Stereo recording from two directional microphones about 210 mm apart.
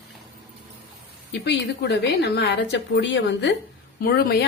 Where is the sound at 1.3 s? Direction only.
55° left (ahead or behind).